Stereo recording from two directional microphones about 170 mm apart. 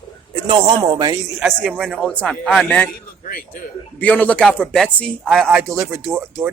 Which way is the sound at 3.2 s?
55° left (ahead or behind).